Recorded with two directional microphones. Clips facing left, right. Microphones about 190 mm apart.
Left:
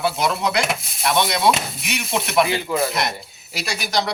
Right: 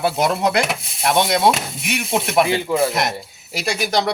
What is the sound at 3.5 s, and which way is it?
Speech, 55° right (ahead or behind).